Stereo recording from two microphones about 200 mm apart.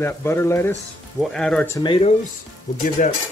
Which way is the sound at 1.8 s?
25° left (ahead or behind).